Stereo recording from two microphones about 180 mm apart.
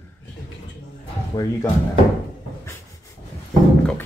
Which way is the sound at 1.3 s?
20° left (ahead or behind).